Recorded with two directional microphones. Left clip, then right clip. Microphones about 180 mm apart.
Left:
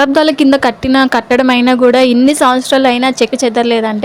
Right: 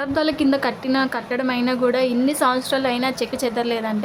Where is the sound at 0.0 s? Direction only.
40° left (ahead or behind).